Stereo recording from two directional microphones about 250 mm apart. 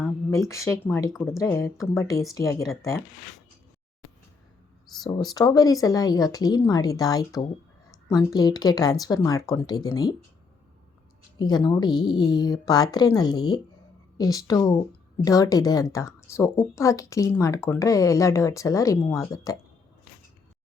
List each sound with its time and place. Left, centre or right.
0.3 s speech: centre
1.1 s speech: centre
1.4 s speech: centre
4.9 s speech: centre
5.3 s speech: centre
11.3 s speech: centre